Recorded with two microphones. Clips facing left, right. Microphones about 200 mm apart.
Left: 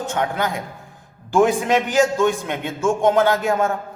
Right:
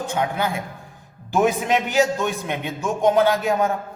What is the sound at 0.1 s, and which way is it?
A man's voice, 10° right (ahead or behind).